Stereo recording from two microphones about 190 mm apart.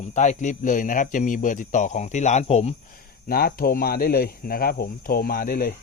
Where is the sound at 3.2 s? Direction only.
50° left (ahead or behind).